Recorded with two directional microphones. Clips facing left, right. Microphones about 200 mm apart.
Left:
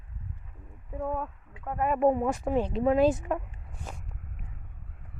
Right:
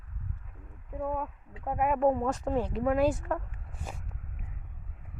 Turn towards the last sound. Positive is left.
turn(degrees=-5)  # may be behind; listen again after turning